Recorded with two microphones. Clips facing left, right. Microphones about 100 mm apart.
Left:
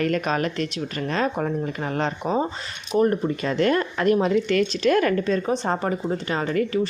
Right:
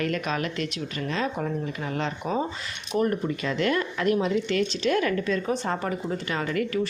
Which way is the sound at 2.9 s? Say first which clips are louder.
Left 4 dB; 35° left (ahead or behind).